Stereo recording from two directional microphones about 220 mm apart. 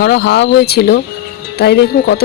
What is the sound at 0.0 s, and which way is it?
Speech, 50° left (ahead or behind).